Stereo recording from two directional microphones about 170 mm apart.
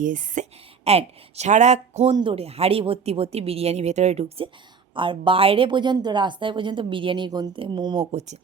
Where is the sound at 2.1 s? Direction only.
30° right (ahead or behind).